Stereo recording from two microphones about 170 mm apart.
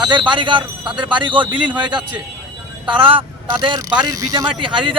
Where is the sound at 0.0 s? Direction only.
25° right (ahead or behind).